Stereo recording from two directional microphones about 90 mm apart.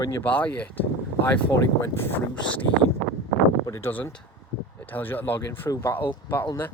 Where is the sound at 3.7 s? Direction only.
25° left (ahead or behind).